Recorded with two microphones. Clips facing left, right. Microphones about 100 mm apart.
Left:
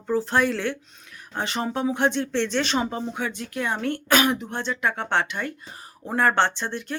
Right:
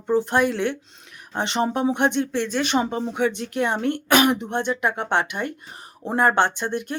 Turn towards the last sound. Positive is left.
turn(degrees=-15)  # may be behind; listen again after turning